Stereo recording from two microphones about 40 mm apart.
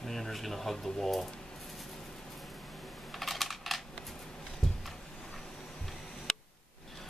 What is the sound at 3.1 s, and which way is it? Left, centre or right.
Computer keyboard, centre.